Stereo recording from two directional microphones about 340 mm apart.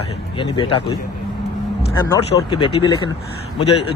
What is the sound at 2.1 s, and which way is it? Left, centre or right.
Speech, centre.